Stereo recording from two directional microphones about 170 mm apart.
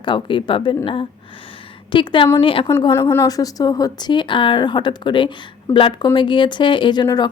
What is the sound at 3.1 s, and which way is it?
Speech, 20° left (ahead or behind).